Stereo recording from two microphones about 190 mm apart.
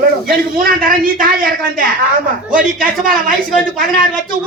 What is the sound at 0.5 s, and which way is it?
A woman's voice, 50° right (ahead or behind).